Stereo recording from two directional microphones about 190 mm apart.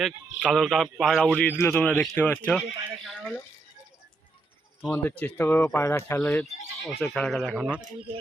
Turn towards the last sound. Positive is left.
turn(degrees=0)  # may be behind; listen again after turning